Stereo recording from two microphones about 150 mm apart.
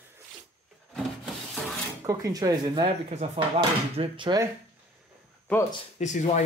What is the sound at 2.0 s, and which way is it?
Speech, 20° right (ahead or behind).